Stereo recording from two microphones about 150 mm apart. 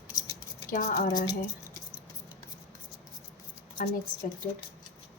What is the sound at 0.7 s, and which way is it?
Speech, 60° left (ahead or behind).